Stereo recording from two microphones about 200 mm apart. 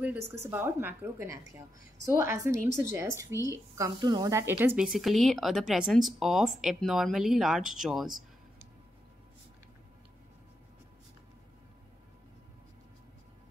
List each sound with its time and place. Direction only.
0.0 s a woman's voice: 10° right (ahead or behind)